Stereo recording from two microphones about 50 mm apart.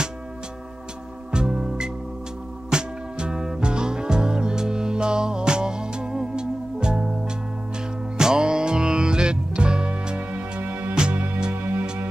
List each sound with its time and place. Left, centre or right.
1.3 s music: centre
8.2 s music: centre
10.6 s music: right
11.0 s music: right
11.5 s music: right